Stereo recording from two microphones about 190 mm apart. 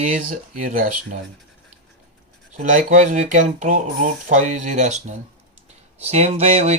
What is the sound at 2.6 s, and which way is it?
Speech, 40° right (ahead or behind).